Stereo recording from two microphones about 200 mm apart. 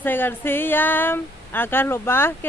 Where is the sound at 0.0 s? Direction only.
10° left (ahead or behind).